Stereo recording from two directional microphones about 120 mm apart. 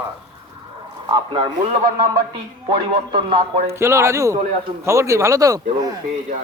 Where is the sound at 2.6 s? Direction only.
40° right (ahead or behind).